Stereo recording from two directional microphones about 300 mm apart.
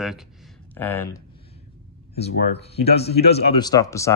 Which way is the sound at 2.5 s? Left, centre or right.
Centre.